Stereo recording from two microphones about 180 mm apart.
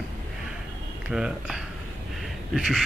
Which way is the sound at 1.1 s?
Centre (ahead or behind).